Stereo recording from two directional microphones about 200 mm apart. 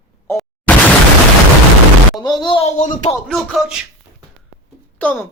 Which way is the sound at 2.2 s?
20° left (ahead or behind).